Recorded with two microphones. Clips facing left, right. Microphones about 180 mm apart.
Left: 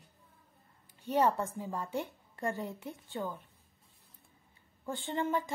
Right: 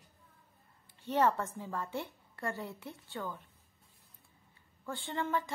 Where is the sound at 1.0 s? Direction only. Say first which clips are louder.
Left 1 dB; 15° left (ahead or behind).